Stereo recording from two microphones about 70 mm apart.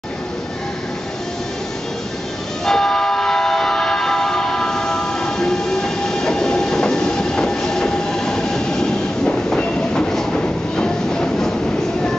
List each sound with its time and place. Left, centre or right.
2.6 s train: centre